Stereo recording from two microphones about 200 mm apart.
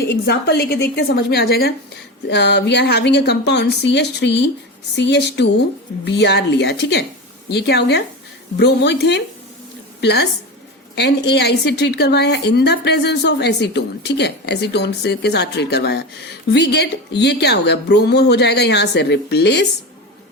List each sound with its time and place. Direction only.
0.1 s a woman's voice: 55° left (ahead or behind)